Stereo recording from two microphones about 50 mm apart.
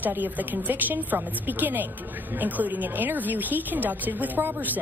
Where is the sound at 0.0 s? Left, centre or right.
Right.